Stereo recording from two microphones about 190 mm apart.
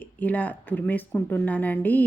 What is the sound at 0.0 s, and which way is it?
Speech, 10° left (ahead or behind).